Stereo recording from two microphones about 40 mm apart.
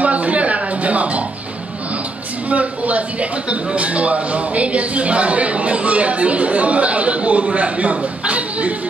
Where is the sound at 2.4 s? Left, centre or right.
Right.